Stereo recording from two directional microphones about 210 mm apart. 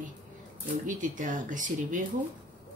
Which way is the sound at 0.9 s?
40° right (ahead or behind).